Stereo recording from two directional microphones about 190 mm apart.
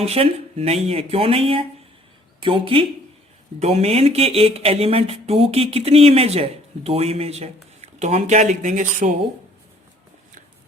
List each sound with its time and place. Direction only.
0.0 s speech: 30° right (ahead or behind)